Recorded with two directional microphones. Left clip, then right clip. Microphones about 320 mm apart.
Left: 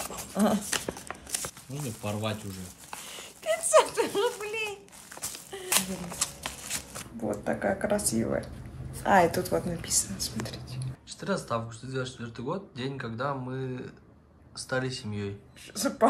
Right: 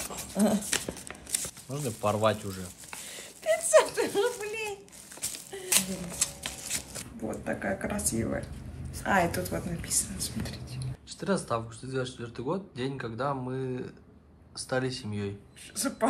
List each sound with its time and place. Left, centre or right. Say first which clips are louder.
0.0 s crumpling: left 1 dB; centre
5.2 s shuffling cards: right 1 dB; centre
7.2 s a woman's voice: left 4 dB; centre
11.1 s speech: right 1 dB; centre